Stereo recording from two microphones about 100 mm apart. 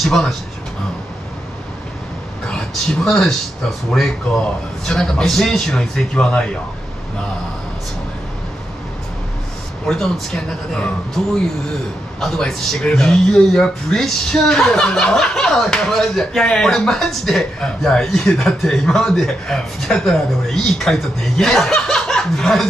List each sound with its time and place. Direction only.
0.0 s speech: 5° left (ahead or behind)
2.4 s speech: 5° left (ahead or behind)
4.8 s speech: 5° left (ahead or behind)
9.8 s speech: 5° left (ahead or behind)